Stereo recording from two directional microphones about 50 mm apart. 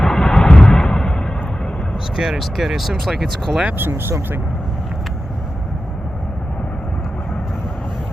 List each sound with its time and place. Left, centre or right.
0.0 s vehicle: centre
2.1 s speech: centre
3.7 s speech: right